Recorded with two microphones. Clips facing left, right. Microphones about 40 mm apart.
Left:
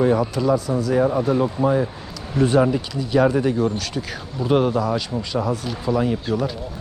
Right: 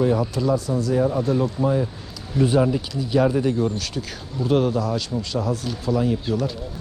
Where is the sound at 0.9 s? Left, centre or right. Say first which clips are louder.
Left 3 dB; left.